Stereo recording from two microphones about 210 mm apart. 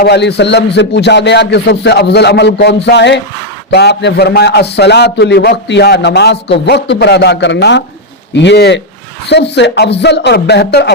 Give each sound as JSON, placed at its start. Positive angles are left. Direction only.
{"t": 0.0, "sound": "a man's voice", "side_deg": 55}